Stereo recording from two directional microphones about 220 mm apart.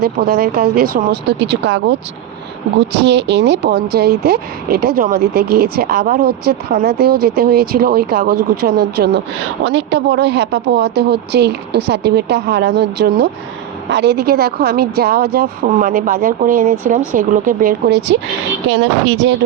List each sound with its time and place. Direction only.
0.0 s speech: 45° right (ahead or behind)
2.9 s speech: 50° right (ahead or behind)
9.6 s speech: 55° right (ahead or behind)
18.7 s a woman's voice: 60° right (ahead or behind)